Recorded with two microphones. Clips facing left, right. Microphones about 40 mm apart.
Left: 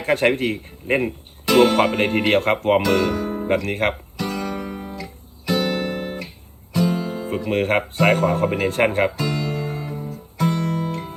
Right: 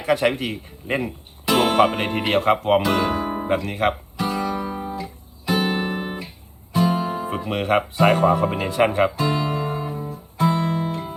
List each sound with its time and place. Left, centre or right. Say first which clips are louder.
0.0 s a man's voice: left 2 dB; left
1.5 s speech: left 2 dB; right
2.0 s a man's voice: left 3 dB; left
2.8 s speech: left 1 dB; right
3.5 s a man's voice: left 1 dB; left
4.2 s music: right 3 dB; right
7.5 s a man's voice: left 1 dB; left
9.1 s music: right 2 dB; right